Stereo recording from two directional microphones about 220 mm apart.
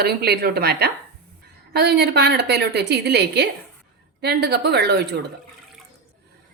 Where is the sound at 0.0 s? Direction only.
45° right (ahead or behind).